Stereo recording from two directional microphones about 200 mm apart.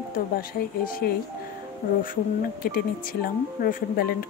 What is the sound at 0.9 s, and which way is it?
Speech, 45° left (ahead or behind).